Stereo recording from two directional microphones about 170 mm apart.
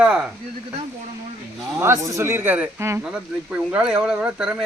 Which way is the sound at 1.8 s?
15° right (ahead or behind).